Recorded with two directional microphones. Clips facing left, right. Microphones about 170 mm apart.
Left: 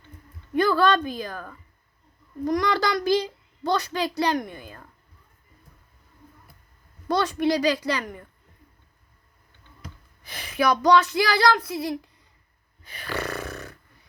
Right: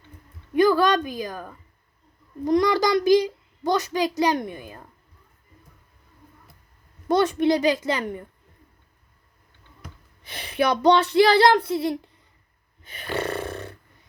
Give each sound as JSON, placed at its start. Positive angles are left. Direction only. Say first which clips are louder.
{"t": 0.5, "sound": "a woman's voice", "louder": "right 2 dB", "side_deg": -15}
{"t": 7.1, "sound": "child singing", "louder": "right 3 dB", "side_deg": -20}
{"t": 10.2, "sound": "child singing", "louder": "even", "side_deg": -25}
{"t": 12.8, "sound": "snoring", "louder": "right 3 dB", "side_deg": -25}